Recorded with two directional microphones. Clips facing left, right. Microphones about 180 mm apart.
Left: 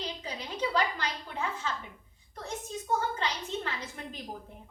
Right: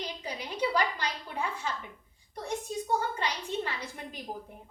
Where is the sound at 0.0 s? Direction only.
10° right (ahead or behind).